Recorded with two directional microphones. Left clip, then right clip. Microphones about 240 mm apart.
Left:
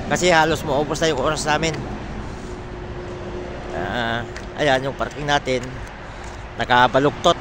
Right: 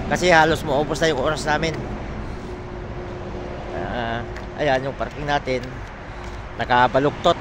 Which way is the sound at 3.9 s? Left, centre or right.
Centre.